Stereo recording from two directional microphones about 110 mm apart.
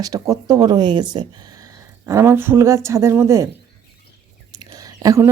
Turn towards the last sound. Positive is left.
turn(degrees=-35)  # may be behind; listen again after turning